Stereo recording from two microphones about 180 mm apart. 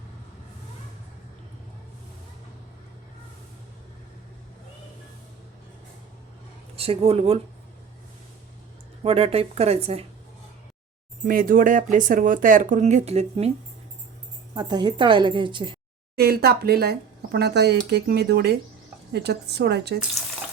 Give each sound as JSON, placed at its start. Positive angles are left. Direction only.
{"t": 6.7, "sound": "speech", "side_deg": -35}
{"t": 9.0, "sound": "speech", "side_deg": -35}
{"t": 11.3, "sound": "speech", "side_deg": -50}
{"t": 14.5, "sound": "a woman's voice", "side_deg": -25}
{"t": 16.1, "sound": "speech", "side_deg": -60}